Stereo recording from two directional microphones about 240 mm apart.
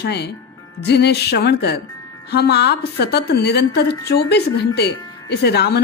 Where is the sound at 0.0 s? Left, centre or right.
Left.